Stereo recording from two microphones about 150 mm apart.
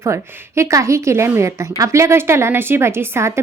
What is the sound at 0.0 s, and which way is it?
A woman's voice, 20° right (ahead or behind).